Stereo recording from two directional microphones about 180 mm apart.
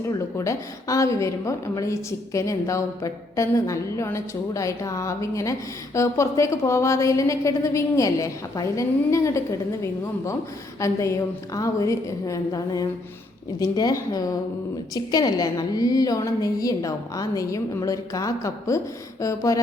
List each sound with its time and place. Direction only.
0.0 s a woman's voice: 15° left (ahead or behind)
10.8 s a woman's voice: 15° left (ahead or behind)